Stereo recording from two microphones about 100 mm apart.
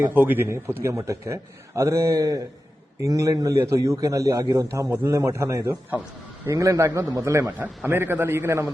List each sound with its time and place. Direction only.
0.1 s a man's voice: 20° right (ahead or behind)